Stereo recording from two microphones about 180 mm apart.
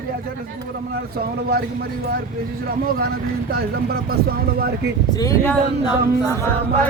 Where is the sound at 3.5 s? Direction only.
55° right (ahead or behind).